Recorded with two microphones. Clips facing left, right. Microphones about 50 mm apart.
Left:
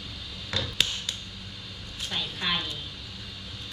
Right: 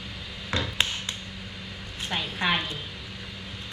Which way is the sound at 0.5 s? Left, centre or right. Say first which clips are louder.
Right 2 dB; right.